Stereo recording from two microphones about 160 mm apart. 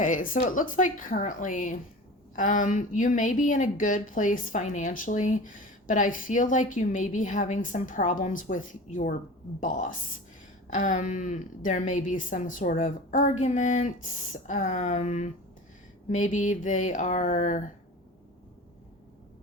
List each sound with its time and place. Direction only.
0.0 s a woman's voice: 55° left (ahead or behind)